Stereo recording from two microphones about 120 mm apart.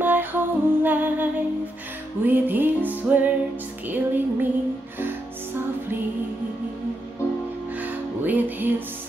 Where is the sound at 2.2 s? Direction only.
15° right (ahead or behind).